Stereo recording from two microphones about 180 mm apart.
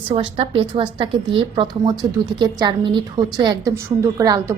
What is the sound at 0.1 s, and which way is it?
A woman's voice, 30° right (ahead or behind).